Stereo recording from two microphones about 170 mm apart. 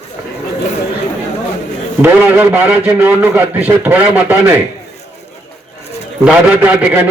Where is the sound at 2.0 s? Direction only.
10° right (ahead or behind).